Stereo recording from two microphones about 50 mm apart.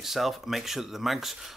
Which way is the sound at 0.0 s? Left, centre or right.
Centre.